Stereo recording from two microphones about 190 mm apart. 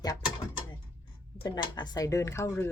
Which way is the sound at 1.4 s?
25° left (ahead or behind).